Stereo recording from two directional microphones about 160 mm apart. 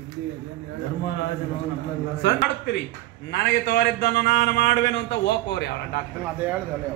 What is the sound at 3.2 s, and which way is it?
A man's voice, 90° left.